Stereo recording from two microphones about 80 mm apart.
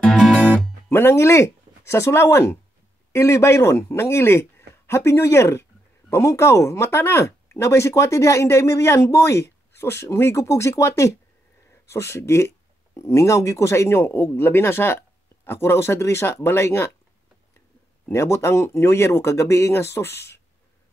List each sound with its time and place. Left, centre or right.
0.1 s music: centre
0.8 s speech: left
18.1 s speech: left